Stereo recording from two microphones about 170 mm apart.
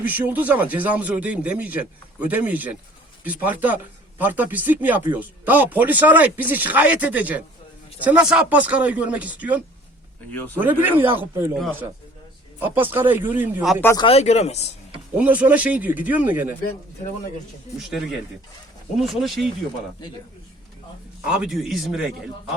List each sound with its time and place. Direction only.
0.0 s speech: 10° right (ahead or behind)
10.3 s speech: 10° left (ahead or behind)
10.6 s speech: 10° right (ahead or behind)
12.5 s speech: 10° right (ahead or behind)
13.8 s speech: 25° left (ahead or behind)
14.1 s speech: 40° left (ahead or behind)
15.1 s speech: 10° right (ahead or behind)
18.9 s a man's voice: centre (ahead or behind)
21.2 s a man's voice: 5° right (ahead or behind)